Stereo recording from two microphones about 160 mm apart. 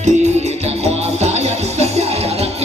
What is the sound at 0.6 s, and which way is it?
Music, 40° right (ahead or behind).